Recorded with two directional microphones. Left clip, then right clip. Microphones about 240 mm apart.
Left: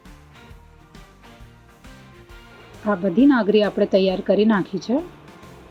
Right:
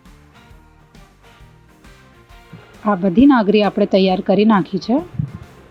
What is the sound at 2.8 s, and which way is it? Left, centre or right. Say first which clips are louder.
Speech: right 4 dB; right.